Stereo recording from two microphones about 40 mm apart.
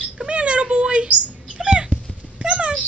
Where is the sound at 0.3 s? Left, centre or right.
Right.